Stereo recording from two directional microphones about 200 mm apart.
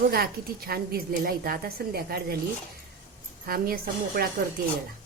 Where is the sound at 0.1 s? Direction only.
50° right (ahead or behind).